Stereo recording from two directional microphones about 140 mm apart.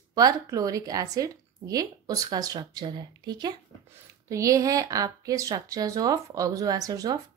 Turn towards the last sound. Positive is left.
turn(degrees=-25)  # may be behind; listen again after turning